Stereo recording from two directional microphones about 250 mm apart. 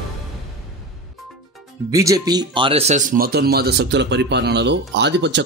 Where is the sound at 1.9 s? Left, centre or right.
Centre.